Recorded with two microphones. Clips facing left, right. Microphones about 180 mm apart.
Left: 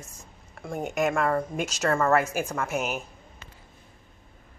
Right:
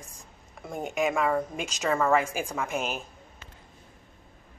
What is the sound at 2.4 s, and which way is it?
Speech, 15° right (ahead or behind).